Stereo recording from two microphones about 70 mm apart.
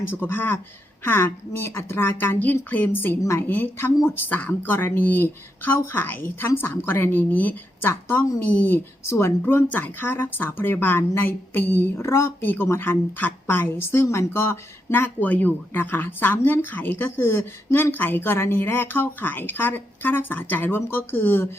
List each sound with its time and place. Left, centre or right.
0.1 s a woman's voice: left